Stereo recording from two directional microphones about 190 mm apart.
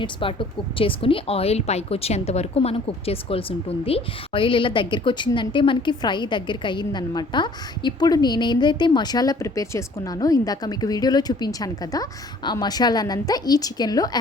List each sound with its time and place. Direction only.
0.0 s a woman's voice: 25° left (ahead or behind)